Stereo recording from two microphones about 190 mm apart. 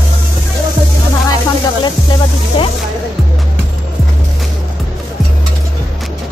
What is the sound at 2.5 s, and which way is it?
Speech, 30° left (ahead or behind).